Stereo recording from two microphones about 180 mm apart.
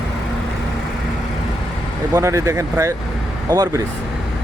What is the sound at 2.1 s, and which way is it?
Speech, 15° right (ahead or behind).